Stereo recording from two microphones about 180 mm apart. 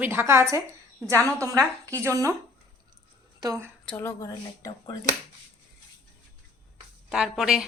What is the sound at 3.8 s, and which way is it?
Speech, 10° left (ahead or behind).